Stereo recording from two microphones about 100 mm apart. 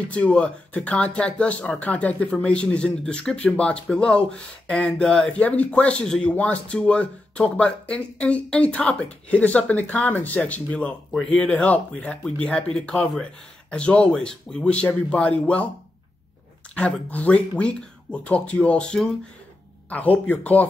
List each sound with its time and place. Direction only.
0.1 s speech: 10° left (ahead or behind)
16.7 s speech: 15° left (ahead or behind)